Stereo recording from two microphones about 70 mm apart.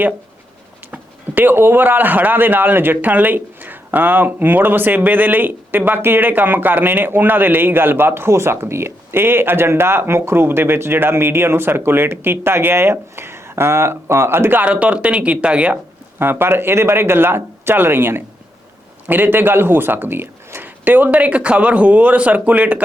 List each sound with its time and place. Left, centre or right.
1.4 s speech: right
14.6 s speech: centre
16.1 s speech: right